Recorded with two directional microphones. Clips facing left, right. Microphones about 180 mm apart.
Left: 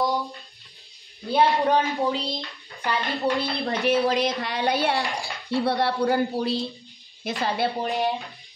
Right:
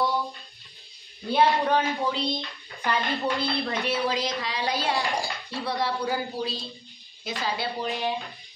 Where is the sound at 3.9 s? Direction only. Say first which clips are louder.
Left 7 dB; 45° left (ahead or behind).